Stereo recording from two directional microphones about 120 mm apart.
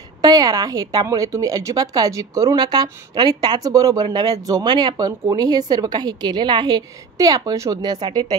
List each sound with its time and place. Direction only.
0.2 s a woman's voice: 30° right (ahead or behind)